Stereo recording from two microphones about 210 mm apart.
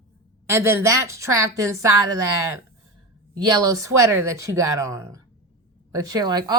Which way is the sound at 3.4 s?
20° right (ahead or behind).